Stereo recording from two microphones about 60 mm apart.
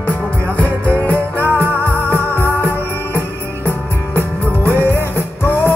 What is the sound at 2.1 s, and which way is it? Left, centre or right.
Music, left.